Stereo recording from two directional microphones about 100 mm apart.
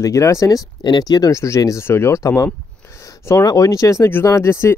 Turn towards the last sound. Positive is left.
turn(degrees=25)  # may be behind; listen again after turning